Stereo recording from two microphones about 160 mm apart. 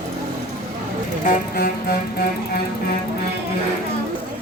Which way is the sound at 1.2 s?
60° left (ahead or behind).